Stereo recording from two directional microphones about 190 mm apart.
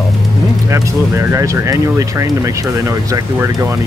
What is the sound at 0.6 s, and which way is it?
Speech, 15° right (ahead or behind).